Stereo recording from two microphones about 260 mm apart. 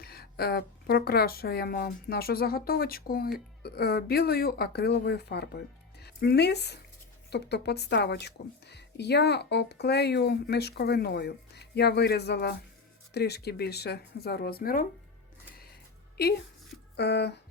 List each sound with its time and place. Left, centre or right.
0.0 s speech: left
17.0 s speech: left